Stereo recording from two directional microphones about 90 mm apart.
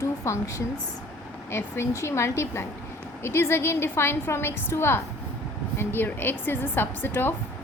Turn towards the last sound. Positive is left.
turn(degrees=20)  # may be behind; listen again after turning